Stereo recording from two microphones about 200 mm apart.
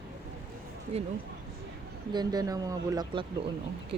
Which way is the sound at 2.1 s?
20° right (ahead or behind).